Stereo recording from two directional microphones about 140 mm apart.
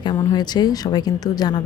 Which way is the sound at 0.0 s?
30° left (ahead or behind).